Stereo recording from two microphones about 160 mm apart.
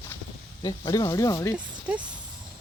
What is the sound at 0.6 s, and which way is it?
Speech, 20° left (ahead or behind).